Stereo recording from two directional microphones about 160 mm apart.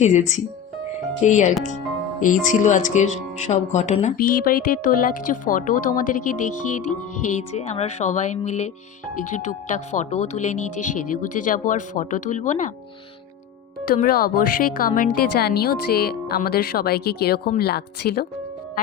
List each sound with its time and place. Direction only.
0.0 s speech: 50° left (ahead or behind)
4.2 s speech: 65° left (ahead or behind)
13.9 s speech: 70° left (ahead or behind)